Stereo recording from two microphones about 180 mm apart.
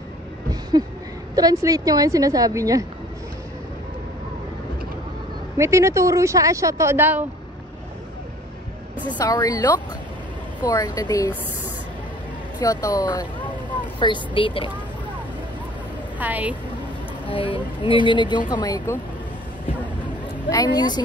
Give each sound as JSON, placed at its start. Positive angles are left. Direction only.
{"t": 0.5, "sound": "a sound", "side_deg": -20}
{"t": 1.3, "sound": "a woman's voice", "side_deg": -20}
{"t": 5.6, "sound": "speech", "side_deg": -15}
{"t": 9.2, "sound": "speech", "side_deg": 20}
{"t": 12.5, "sound": "speech", "side_deg": 20}
{"t": 13.4, "sound": "vehicle", "side_deg": 10}
{"t": 13.9, "sound": "speech", "side_deg": 25}
{"t": 16.2, "sound": "speech", "side_deg": -10}
{"t": 17.3, "sound": "speech", "side_deg": 25}
{"t": 20.5, "sound": "speech", "side_deg": 25}